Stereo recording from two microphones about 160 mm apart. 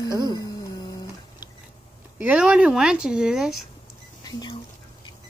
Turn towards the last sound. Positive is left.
turn(degrees=25)  # may be behind; listen again after turning